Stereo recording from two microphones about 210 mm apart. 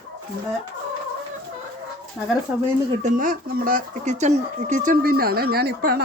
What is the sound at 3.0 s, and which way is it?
Speech, 40° right (ahead or behind).